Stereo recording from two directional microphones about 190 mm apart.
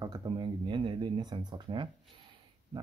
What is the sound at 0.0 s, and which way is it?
Speech, 25° right (ahead or behind).